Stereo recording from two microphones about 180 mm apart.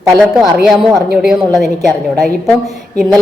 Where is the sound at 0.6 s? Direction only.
Centre (ahead or behind).